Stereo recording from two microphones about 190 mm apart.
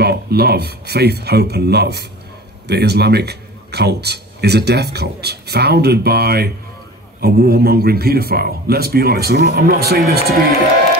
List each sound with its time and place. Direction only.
0.0 s a man's voice: 55° right (ahead or behind)